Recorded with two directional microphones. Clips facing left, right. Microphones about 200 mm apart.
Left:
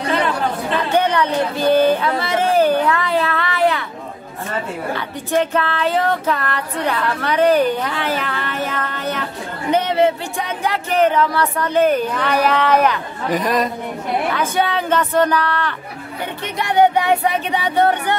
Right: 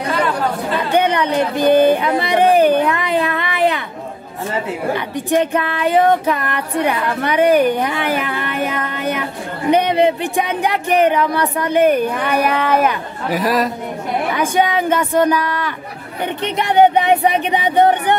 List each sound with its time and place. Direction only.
0.9 s speech: 15° right (ahead or behind)
4.9 s speech: 15° right (ahead or behind)
16.4 s speech: 20° right (ahead or behind)